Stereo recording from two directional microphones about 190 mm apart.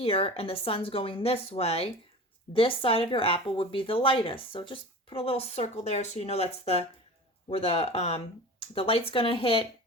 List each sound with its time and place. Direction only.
0.0 s speech: 30° left (ahead or behind)